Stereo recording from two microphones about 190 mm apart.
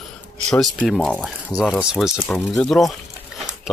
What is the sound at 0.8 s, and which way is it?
Speech, centre (ahead or behind).